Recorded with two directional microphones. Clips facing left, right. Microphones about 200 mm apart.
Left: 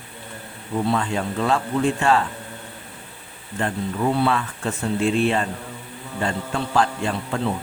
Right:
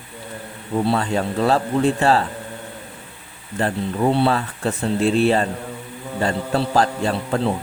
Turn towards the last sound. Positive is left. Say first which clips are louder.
# right 4 dB
turn(degrees=-40)  # may be behind; listen again after turning